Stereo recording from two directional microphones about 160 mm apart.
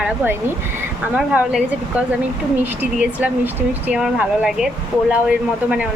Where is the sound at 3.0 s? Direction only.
10° right (ahead or behind).